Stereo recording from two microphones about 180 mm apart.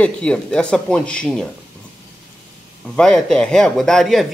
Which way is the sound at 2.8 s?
5° left (ahead or behind).